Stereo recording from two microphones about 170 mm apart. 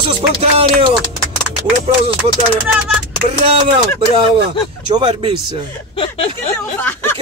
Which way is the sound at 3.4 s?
35° right (ahead or behind).